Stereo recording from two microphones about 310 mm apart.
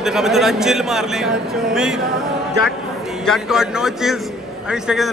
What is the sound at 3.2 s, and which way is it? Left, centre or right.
A man's voice, centre.